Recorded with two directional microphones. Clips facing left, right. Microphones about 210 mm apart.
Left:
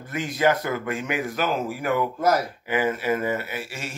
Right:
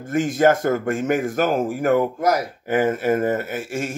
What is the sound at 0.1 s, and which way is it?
Speech, 50° right (ahead or behind).